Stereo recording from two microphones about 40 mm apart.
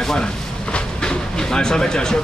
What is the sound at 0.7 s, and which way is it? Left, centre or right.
Train, centre.